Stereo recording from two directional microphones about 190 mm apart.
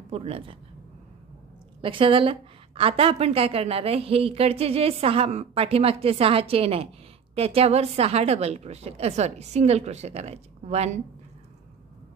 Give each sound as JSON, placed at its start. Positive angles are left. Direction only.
{"t": 0.1, "sound": "a woman's voice", "side_deg": -30}
{"t": 1.8, "sound": "a woman's voice", "side_deg": -25}